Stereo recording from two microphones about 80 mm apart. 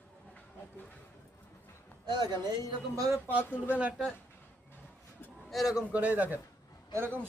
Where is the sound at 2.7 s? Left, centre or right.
Right.